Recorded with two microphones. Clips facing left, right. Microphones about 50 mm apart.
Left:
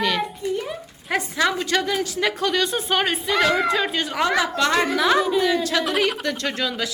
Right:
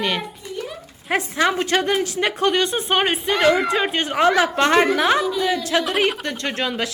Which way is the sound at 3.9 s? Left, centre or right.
Right.